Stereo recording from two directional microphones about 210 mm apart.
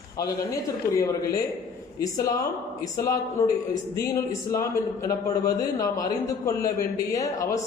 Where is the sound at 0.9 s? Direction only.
15° left (ahead or behind).